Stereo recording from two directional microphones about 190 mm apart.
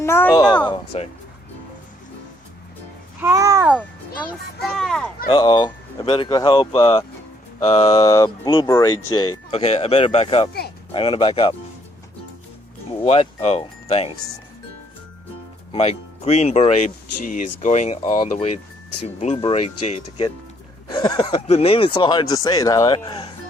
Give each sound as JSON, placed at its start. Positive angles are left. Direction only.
{"t": 0.0, "sound": "speech", "side_deg": 10}
{"t": 0.9, "sound": "speech", "side_deg": 35}
{"t": 3.2, "sound": "a child's voice", "side_deg": -15}
{"t": 4.3, "sound": "a child's voice", "side_deg": 0}
{"t": 5.3, "sound": "speech", "side_deg": 25}
{"t": 13.1, "sound": "speech", "side_deg": 35}
{"t": 15.7, "sound": "speech", "side_deg": 35}
{"t": 18.0, "sound": "speech", "side_deg": 25}
{"t": 20.9, "sound": "speech", "side_deg": 20}